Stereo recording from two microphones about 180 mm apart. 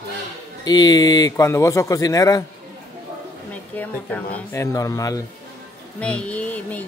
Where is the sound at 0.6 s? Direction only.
20° left (ahead or behind).